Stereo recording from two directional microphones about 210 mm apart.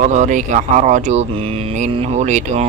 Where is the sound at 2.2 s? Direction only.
35° right (ahead or behind).